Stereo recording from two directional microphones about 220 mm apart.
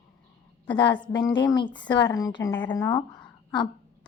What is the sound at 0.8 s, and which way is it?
A woman's voice, 20° left (ahead or behind).